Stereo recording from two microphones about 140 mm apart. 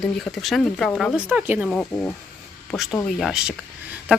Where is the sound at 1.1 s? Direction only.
10° right (ahead or behind).